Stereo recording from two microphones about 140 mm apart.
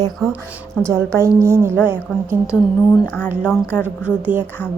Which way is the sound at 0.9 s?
20° right (ahead or behind).